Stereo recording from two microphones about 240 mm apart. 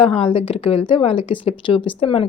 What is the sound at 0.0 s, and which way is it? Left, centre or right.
Speech, left.